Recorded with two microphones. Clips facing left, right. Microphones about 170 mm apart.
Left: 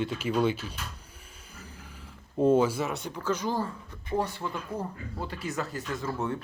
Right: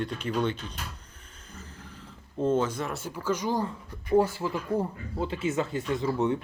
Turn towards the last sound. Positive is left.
turn(degrees=-20)  # may be behind; listen again after turning